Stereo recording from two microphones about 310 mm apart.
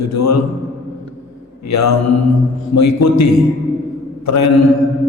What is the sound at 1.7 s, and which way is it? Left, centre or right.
A man's voice, left.